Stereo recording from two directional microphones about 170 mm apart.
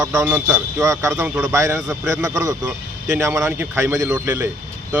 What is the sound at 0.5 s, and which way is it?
A man's voice, 20° right (ahead or behind).